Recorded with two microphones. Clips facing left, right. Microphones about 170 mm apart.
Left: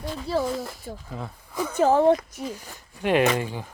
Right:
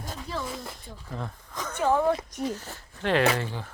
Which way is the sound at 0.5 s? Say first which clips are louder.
Left 7 dB; 5° left (ahead or behind).